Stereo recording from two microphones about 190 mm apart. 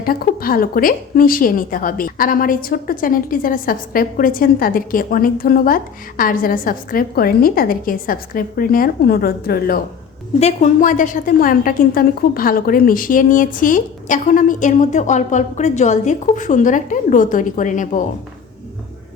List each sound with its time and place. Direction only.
0.0 s a woman's voice: 50° left (ahead or behind)
10.4 s a woman's voice: 40° left (ahead or behind)